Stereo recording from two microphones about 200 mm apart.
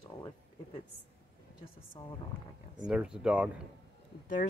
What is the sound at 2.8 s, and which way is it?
Speech, 5° right (ahead or behind).